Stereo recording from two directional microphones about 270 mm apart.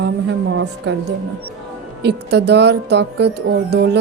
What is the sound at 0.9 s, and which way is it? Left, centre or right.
Speech, right.